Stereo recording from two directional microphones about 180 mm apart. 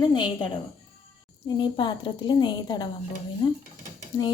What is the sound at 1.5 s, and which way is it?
A woman's voice, 25° left (ahead or behind).